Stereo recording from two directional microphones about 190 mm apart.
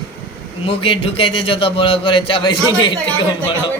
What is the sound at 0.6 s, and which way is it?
A man's voice, 30° left (ahead or behind).